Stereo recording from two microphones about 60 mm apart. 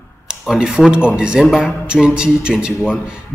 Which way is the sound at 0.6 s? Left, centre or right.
Centre.